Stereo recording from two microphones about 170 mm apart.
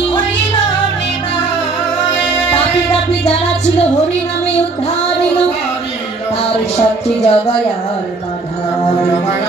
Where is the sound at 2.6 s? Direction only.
35° left (ahead or behind).